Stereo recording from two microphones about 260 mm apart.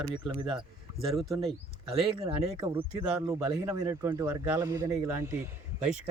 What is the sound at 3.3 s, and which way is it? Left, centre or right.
A man's voice, centre.